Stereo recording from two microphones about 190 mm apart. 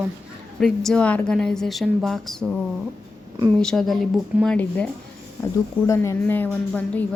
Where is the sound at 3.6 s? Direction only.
Centre (ahead or behind).